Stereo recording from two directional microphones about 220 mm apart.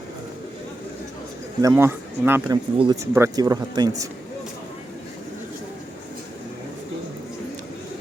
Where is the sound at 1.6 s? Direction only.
10° right (ahead or behind).